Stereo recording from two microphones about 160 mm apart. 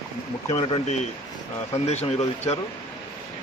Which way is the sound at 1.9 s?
45° left (ahead or behind).